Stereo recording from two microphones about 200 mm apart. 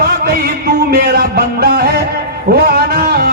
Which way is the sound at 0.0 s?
50° right (ahead or behind).